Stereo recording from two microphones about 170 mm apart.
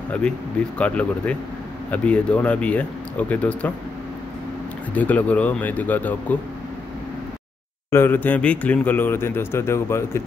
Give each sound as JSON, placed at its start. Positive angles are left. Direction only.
{"t": 0.7, "sound": "speech", "side_deg": 5}
{"t": 4.9, "sound": "speech", "side_deg": 10}
{"t": 7.9, "sound": "speech", "side_deg": 10}